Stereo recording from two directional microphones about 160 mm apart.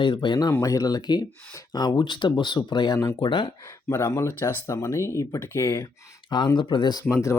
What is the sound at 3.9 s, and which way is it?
Speech, 15° left (ahead or behind).